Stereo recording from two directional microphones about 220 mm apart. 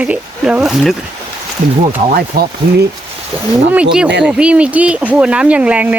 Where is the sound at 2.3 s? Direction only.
45° right (ahead or behind).